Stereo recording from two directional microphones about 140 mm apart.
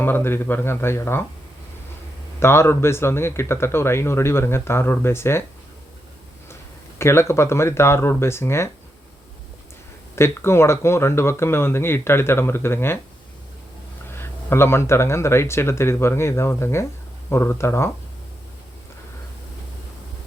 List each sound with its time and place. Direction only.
0.0 s speech: 15° left (ahead or behind)
2.4 s speech: 15° left (ahead or behind)
7.0 s speech: 20° left (ahead or behind)
10.2 s speech: 20° left (ahead or behind)
14.1 s speech: 15° left (ahead or behind)